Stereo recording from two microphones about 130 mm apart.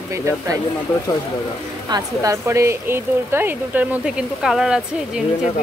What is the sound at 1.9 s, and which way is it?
Speech, 25° right (ahead or behind).